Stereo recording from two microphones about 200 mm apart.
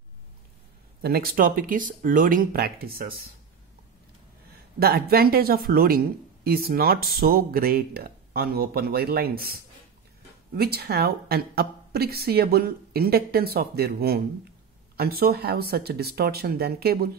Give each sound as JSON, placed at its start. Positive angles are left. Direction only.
{"t": 1.0, "sound": "a woman's voice", "side_deg": -50}
{"t": 4.7, "sound": "a woman's voice", "side_deg": -50}